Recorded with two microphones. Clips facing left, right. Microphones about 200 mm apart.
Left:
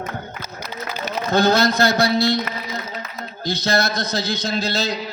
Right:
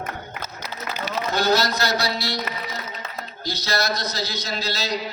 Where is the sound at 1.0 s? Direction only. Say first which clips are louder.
Left 5 dB; 50° left (ahead or behind).